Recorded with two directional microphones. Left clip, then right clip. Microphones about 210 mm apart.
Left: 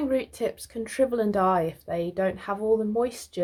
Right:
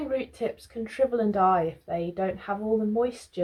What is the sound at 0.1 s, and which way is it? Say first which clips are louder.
A woman's voice: left 2 dB; 45° left (ahead or behind).